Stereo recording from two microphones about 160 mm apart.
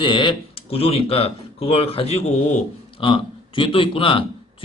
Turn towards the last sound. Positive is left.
turn(degrees=35)  # may be behind; listen again after turning